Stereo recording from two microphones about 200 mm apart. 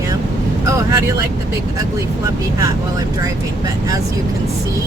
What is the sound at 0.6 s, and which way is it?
Speech, 15° right (ahead or behind).